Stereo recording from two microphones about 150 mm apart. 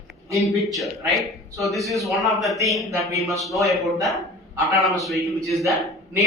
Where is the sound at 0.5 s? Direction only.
Centre (ahead or behind).